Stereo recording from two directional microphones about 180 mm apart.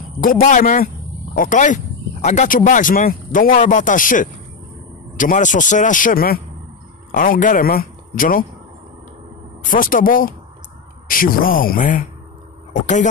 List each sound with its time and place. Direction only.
0.2 s speech: 50° left (ahead or behind)
9.7 s speech: 50° left (ahead or behind)